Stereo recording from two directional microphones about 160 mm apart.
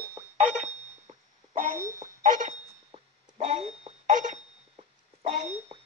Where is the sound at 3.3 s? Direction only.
45° right (ahead or behind).